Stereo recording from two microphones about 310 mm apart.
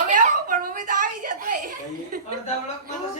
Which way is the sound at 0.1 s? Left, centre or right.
Right.